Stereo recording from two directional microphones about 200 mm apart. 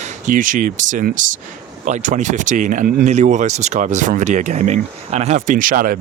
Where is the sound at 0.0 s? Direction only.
40° right (ahead or behind).